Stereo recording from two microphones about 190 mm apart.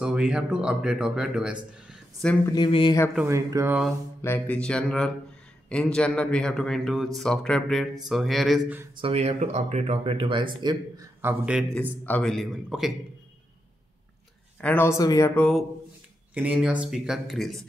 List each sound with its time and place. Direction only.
0.0 s speech: 5° right (ahead or behind)
2.4 s speech: 25° left (ahead or behind)
3.2 s speech: 15° right (ahead or behind)
4.2 s speech: 10° left (ahead or behind); by 8.8 s 5° right (ahead or behind)
9.0 s speech: 35° right (ahead or behind)
11.1 s a man's voice: 10° right (ahead or behind)
12.1 s speech: centre (ahead or behind)
14.6 s speech: 10° left (ahead or behind)
16.3 s speech: 5° right (ahead or behind)